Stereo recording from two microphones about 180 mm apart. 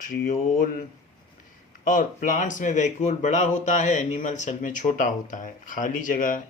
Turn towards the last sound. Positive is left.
turn(degrees=50)  # may be behind; listen again after turning